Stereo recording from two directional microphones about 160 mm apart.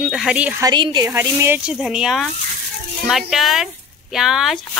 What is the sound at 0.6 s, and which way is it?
A woman's voice, 30° right (ahead or behind).